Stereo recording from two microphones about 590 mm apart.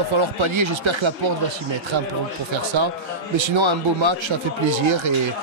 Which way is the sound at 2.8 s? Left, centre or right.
Right.